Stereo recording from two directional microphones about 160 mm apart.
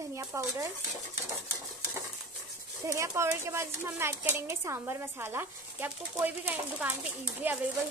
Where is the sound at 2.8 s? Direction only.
20° right (ahead or behind).